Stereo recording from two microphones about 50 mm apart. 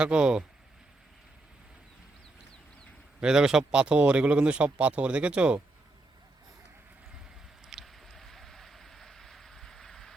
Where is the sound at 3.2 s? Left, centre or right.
Centre.